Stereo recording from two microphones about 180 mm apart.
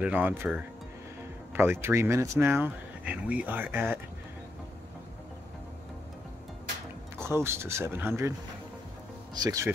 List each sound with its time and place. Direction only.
0.0 s speech: 10° right (ahead or behind)
7.2 s speech: 15° right (ahead or behind)
9.4 s speech: 20° right (ahead or behind)